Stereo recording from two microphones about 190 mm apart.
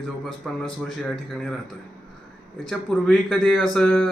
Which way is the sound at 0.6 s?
Centre (ahead or behind).